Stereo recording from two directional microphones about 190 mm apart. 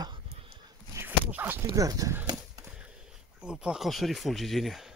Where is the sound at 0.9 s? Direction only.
10° right (ahead or behind).